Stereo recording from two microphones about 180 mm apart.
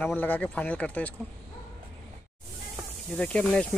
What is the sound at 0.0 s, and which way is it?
Speech, 10° left (ahead or behind).